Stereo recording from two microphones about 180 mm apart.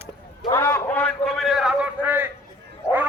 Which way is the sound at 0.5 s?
10° left (ahead or behind).